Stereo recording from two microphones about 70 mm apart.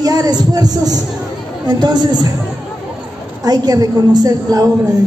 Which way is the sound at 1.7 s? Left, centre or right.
Right.